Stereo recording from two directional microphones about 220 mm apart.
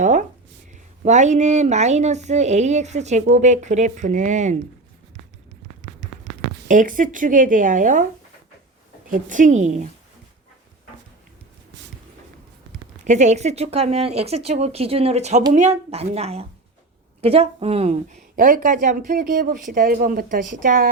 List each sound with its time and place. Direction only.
0.0 s speech: 35° right (ahead or behind)
6.7 s speech: 35° right (ahead or behind)
9.0 s speech: 35° right (ahead or behind)
13.1 s speech: 30° right (ahead or behind)